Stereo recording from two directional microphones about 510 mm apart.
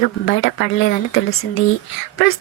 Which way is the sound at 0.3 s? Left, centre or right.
Left.